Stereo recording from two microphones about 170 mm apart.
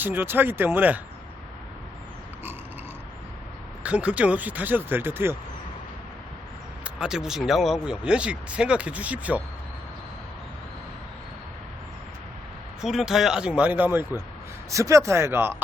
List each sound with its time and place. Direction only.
0.0 s speech: 10° right (ahead or behind)
3.8 s speech: 5° right (ahead or behind)
6.8 s speech: 5° right (ahead or behind)
12.8 s speech: centre (ahead or behind)